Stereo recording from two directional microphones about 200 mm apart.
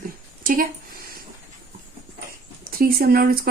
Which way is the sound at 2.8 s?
50° right (ahead or behind).